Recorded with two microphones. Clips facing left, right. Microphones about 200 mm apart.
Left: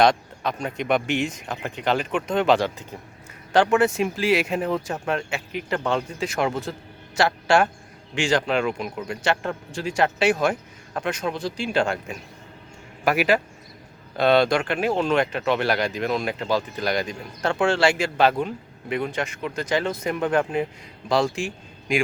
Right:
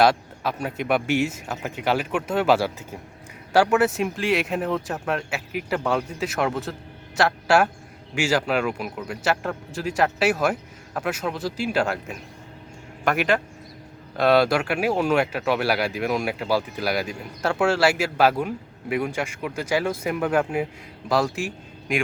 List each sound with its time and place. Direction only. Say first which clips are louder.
0.0 s a man's voice: even; 5° right (ahead or behind)